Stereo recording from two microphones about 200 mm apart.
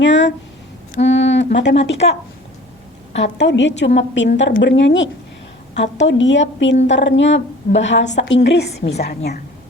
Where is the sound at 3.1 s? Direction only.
60° left (ahead or behind).